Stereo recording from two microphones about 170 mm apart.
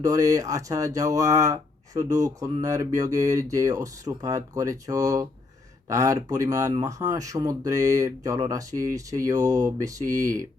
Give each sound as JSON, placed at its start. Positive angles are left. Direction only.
{"t": 0.0, "sound": "speech", "side_deg": -20}